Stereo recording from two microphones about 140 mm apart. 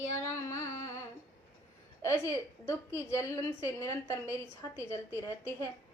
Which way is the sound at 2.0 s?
20° left (ahead or behind).